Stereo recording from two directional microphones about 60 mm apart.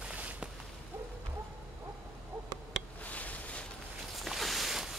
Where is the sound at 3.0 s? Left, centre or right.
Left.